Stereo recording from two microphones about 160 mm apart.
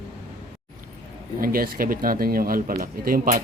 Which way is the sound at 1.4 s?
65° right (ahead or behind).